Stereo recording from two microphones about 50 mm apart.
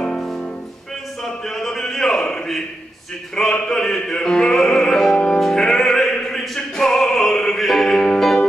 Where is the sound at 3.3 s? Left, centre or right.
Centre.